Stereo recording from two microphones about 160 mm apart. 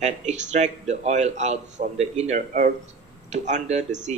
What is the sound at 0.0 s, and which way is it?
A man's voice, 45° right (ahead or behind).